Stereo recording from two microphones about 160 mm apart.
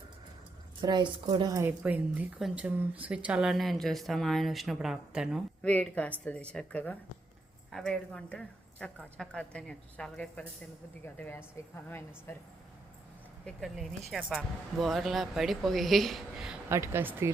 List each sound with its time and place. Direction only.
0.8 s a woman's voice: 25° right (ahead or behind); by 5.4 s 5° right (ahead or behind)
5.6 s a woman's voice: 10° left (ahead or behind)
13.4 s a woman's voice: centre (ahead or behind)
16.6 s speech: 15° right (ahead or behind)